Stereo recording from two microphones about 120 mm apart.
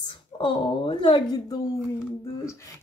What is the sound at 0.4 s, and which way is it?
Speech, 45° left (ahead or behind).